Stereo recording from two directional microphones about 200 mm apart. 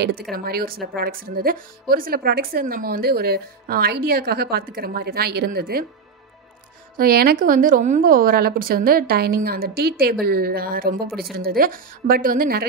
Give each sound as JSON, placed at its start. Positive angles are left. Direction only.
{"t": 0.3, "sound": "speech", "side_deg": -50}
{"t": 7.0, "sound": "speech", "side_deg": -50}